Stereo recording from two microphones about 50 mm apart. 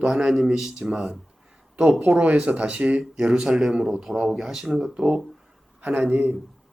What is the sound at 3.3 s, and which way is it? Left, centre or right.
Speech, centre.